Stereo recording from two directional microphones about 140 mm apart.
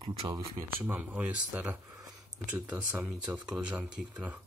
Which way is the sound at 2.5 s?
10° right (ahead or behind).